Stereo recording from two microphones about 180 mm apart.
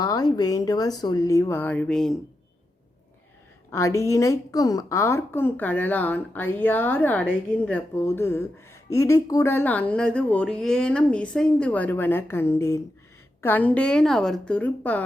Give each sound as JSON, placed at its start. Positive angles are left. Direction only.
{"t": 0.0, "sound": "a woman's voice", "side_deg": 20}
{"t": 3.7, "sound": "a woman's voice", "side_deg": 15}